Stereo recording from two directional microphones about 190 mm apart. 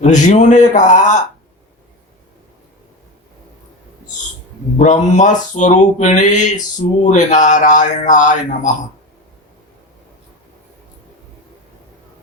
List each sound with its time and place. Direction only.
0.0 s speech: 40° left (ahead or behind)
4.8 s speech: 40° left (ahead or behind)